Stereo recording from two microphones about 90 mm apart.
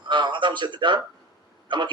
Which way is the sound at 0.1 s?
60° right (ahead or behind).